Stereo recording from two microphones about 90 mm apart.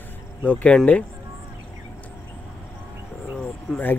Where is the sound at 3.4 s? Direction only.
20° left (ahead or behind).